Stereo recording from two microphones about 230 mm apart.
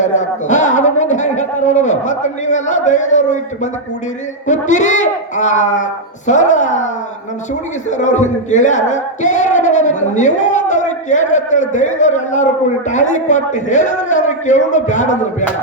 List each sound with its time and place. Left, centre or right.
0.0 s speech: left